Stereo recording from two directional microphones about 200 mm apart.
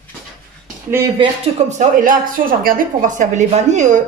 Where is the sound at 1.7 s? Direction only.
40° right (ahead or behind).